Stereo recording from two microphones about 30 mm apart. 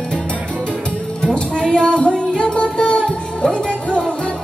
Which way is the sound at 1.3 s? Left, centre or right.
Left.